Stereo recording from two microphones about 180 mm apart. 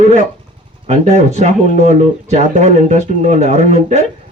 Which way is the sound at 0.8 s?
40° right (ahead or behind).